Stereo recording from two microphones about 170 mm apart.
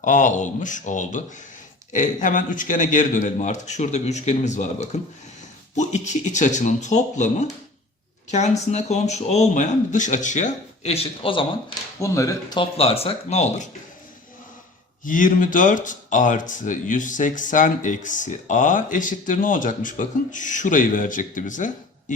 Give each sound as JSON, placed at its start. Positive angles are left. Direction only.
{"t": 0.0, "sound": "speech", "side_deg": 45}
{"t": 11.9, "sound": "speech", "side_deg": 20}
{"t": 12.5, "sound": "speech", "side_deg": 35}
{"t": 15.0, "sound": "speech", "side_deg": 50}